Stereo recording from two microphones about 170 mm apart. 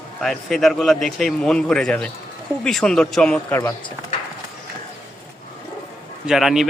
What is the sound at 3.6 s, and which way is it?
Speech, 20° left (ahead or behind).